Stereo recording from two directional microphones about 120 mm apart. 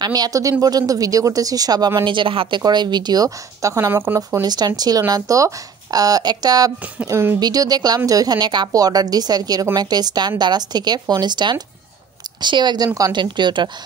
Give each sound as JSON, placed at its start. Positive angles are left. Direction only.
{"t": 0.0, "sound": "speech", "side_deg": -35}
{"t": 2.6, "sound": "speech", "side_deg": -35}
{"t": 4.2, "sound": "speech", "side_deg": -35}
{"t": 7.1, "sound": "speech", "side_deg": -25}
{"t": 7.3, "sound": "speech", "side_deg": -35}